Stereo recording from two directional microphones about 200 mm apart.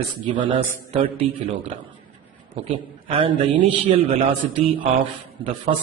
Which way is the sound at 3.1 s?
25° right (ahead or behind).